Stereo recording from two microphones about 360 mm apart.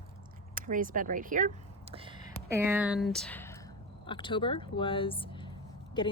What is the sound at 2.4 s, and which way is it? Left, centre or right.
Speech, centre.